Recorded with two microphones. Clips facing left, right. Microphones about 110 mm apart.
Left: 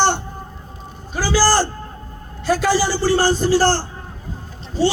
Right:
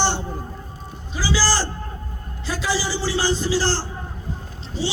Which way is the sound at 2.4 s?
55° left (ahead or behind).